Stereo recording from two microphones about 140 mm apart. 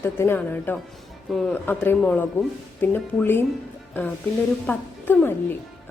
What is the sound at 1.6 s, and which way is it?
A woman's voice, 15° left (ahead or behind).